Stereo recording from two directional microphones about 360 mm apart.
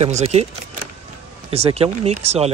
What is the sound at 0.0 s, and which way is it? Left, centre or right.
Speech, centre.